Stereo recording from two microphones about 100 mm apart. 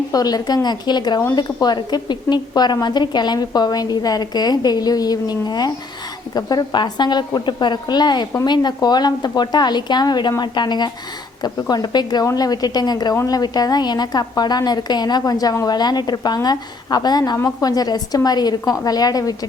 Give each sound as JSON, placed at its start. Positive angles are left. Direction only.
{"t": 0.1, "sound": "a woman's voice", "side_deg": 40}